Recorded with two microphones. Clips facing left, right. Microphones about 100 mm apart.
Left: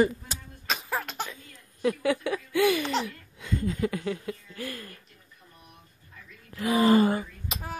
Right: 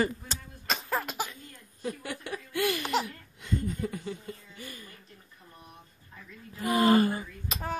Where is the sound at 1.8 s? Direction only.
90° left.